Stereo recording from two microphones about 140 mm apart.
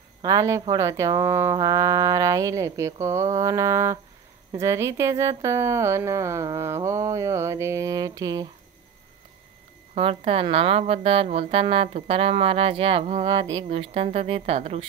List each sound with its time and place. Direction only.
0.2 s speech: 25° right (ahead or behind)
9.9 s a woman's voice: 40° right (ahead or behind)